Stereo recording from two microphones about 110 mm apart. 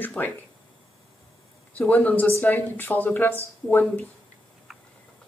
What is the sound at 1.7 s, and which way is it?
Speech, 15° left (ahead or behind).